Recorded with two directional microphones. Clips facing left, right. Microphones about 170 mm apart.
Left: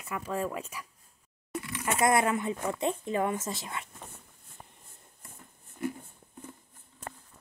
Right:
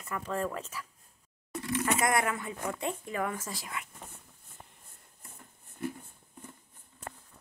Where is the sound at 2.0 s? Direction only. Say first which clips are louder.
Left 4 dB; 25° left (ahead or behind).